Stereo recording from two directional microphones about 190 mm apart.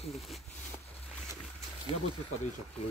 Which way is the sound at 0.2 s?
Centre (ahead or behind).